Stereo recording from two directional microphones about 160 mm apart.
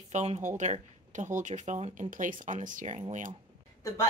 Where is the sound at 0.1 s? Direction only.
45° right (ahead or behind).